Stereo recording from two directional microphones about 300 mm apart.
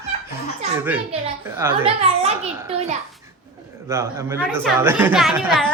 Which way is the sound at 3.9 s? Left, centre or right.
Centre.